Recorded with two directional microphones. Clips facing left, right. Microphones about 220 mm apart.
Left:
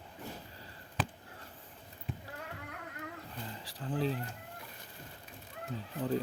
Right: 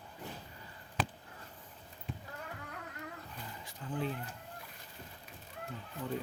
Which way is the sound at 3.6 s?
35° left (ahead or behind).